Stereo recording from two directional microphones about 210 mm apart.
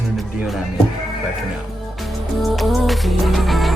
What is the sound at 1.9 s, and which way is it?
Music, centre (ahead or behind).